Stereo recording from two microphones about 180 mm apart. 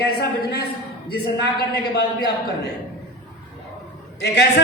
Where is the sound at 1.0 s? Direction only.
65° left (ahead or behind).